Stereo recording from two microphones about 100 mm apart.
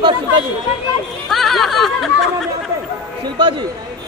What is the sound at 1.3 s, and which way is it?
Speech, centre (ahead or behind).